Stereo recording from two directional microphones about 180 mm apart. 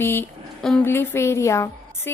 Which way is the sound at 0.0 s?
10° left (ahead or behind).